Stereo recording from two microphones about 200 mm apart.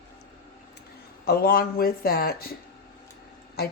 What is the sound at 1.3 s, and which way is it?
Speech, 50° left (ahead or behind).